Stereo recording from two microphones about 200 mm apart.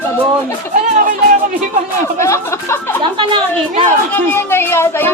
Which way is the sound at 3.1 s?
25° right (ahead or behind).